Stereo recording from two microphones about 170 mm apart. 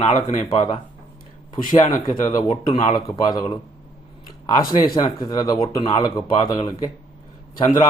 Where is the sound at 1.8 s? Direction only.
25° left (ahead or behind).